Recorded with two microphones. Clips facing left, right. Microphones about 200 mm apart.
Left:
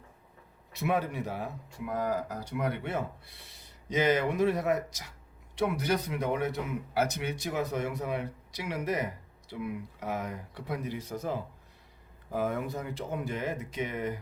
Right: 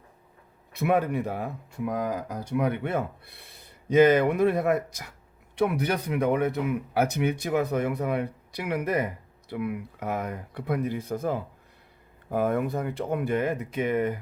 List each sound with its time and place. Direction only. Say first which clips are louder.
0.7 s speech: right 6 dB; 55° right (ahead or behind)